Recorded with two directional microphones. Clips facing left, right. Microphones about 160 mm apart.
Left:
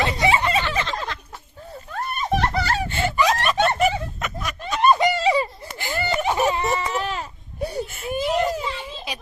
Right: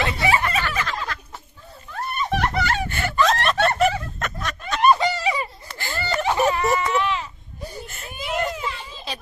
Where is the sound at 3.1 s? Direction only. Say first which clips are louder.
Right 2 dB; 10° left (ahead or behind).